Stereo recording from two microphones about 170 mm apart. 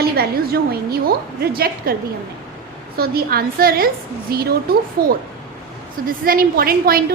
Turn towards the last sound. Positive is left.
turn(degrees=-60)  # may be behind; listen again after turning